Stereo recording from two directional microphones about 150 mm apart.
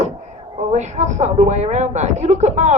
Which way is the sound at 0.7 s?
50° right (ahead or behind).